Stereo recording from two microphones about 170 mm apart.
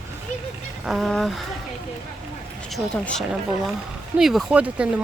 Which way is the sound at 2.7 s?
Centre (ahead or behind).